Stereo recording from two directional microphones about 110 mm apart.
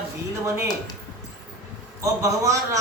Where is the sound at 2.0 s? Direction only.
30° right (ahead or behind).